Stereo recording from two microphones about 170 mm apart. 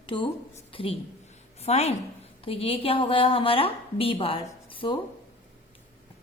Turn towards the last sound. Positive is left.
turn(degrees=30)  # may be behind; listen again after turning